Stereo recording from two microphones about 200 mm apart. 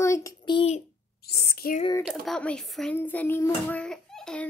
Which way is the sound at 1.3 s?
50° left (ahead or behind).